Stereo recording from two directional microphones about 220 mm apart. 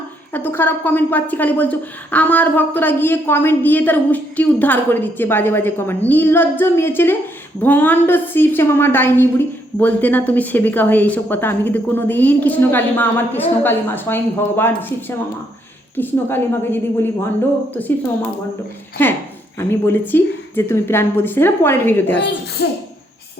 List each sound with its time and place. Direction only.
0.3 s a woman's voice: 10° left (ahead or behind)
19.5 s a woman's voice: 10° left (ahead or behind)
22.6 s speech: 50° left (ahead or behind)